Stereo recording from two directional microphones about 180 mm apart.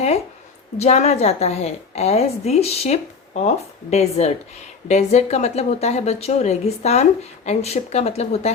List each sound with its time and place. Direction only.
0.8 s speech: 40° left (ahead or behind)